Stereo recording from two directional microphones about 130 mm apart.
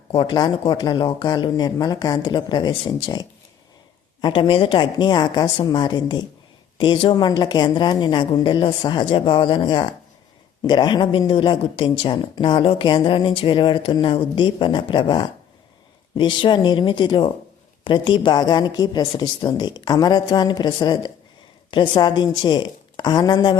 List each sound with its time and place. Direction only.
0.1 s a woman's voice: 40° left (ahead or behind)